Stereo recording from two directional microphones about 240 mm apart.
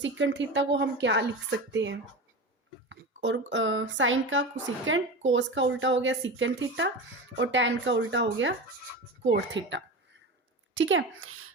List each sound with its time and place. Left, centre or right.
0.0 s a woman's voice: right